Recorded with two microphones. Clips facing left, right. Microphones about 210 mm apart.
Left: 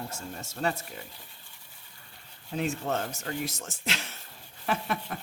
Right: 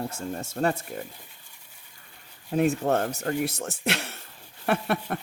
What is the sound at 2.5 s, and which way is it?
Speech, 55° right (ahead or behind).